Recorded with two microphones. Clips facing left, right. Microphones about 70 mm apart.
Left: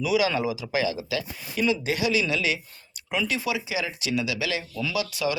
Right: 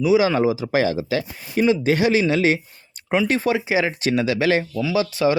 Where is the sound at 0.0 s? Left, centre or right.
Right.